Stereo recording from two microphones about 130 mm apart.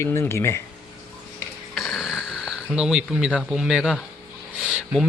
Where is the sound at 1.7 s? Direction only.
Centre (ahead or behind).